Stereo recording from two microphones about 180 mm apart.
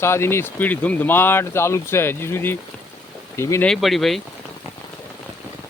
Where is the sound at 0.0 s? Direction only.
15° left (ahead or behind).